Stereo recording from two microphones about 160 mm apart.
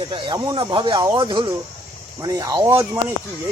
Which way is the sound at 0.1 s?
25° right (ahead or behind).